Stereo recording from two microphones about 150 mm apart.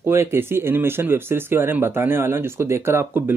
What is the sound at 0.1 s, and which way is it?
Speech, 15° right (ahead or behind).